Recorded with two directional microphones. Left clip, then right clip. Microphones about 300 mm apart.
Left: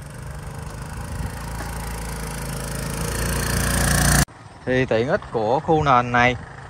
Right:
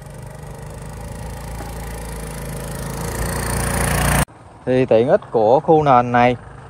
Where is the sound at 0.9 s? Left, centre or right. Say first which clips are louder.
Even; centre.